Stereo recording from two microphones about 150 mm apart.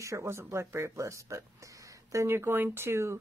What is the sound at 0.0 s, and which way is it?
Speech, 20° right (ahead or behind).